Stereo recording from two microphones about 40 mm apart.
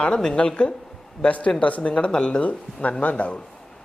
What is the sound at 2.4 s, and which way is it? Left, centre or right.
Speech, left.